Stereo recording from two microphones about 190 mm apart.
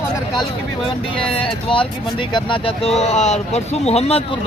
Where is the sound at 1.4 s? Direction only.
25° left (ahead or behind).